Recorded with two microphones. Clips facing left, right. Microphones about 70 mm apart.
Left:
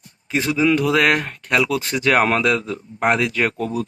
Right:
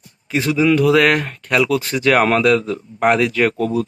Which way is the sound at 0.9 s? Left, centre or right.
Left.